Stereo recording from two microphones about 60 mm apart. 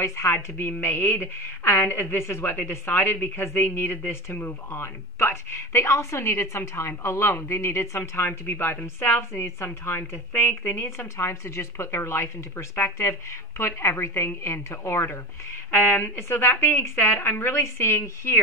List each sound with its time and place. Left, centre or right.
0.0 s a woman's voice: left
11.0 s a woman's voice: left